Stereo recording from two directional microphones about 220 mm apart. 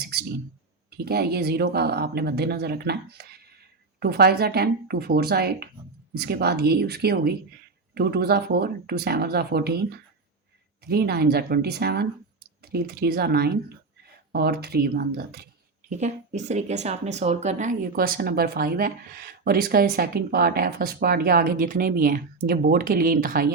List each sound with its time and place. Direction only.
0.0 s clicking: 45° right (ahead or behind)
0.9 s speech: 45° right (ahead or behind)
15.9 s speech: 30° right (ahead or behind)